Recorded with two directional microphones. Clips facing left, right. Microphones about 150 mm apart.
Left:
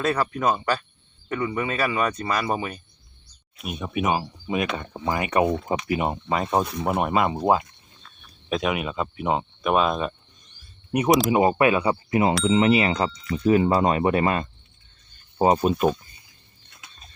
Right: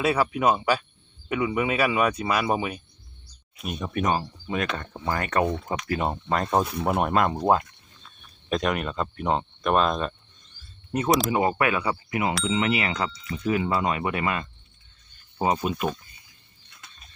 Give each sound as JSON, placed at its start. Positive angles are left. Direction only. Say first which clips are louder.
{"t": 0.0, "sound": "speech", "louder": "right 1 dB", "side_deg": -10}
{"t": 3.6, "sound": "speech", "louder": "left 1 dB", "side_deg": 0}